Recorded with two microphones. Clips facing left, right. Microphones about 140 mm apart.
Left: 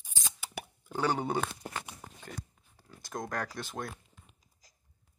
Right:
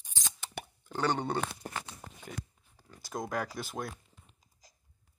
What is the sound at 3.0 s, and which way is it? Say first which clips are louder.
Speech: right 1 dB; 5° right (ahead or behind).